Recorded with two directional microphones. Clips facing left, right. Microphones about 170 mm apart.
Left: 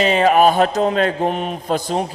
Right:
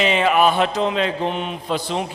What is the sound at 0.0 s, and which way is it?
A man's voice, 40° left (ahead or behind).